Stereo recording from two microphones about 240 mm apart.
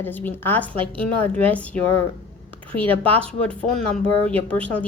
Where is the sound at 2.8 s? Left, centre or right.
Right.